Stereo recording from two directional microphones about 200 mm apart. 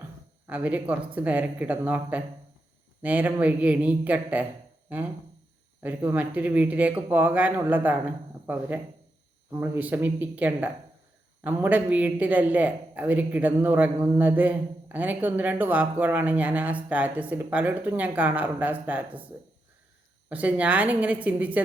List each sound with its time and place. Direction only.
0.4 s a man's voice: 5° right (ahead or behind)
5.8 s a man's voice: 10° right (ahead or behind)
20.3 s a man's voice: 5° right (ahead or behind)